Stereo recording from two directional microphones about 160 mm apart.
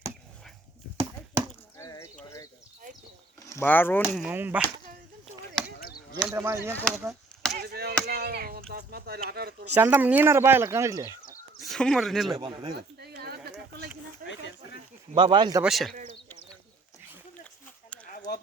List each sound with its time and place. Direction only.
1.8 s horse: 20° left (ahead or behind)
3.4 s speech: 15° left (ahead or behind)
4.0 s speech: 5° right (ahead or behind)
5.8 s chop: 70° left (ahead or behind)
6.2 s speech: 15° right (ahead or behind)
7.5 s chop: 80° right
8.0 s speech: 80° right
9.7 s speech: 10° right (ahead or behind)
11.6 s speech: 5° left (ahead or behind)
12.4 s speech: 30° right (ahead or behind)
12.7 s a sound: 80° right
15.1 s speech: 30° right (ahead or behind)
15.6 s speech: centre (ahead or behind)